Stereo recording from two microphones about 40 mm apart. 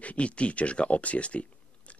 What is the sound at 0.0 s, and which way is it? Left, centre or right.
Speech, left.